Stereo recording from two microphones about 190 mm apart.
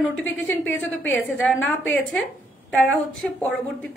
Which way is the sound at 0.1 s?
90° left.